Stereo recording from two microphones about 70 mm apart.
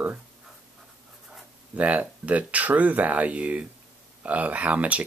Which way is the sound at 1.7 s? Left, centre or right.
Centre.